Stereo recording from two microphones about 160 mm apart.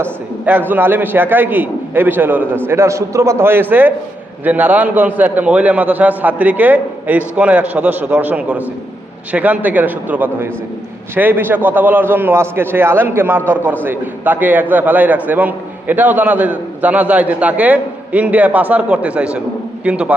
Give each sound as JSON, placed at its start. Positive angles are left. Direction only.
{"t": 0.0, "sound": "a man's voice", "side_deg": -10}